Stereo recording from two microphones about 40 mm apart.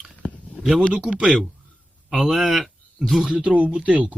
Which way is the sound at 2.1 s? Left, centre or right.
Centre.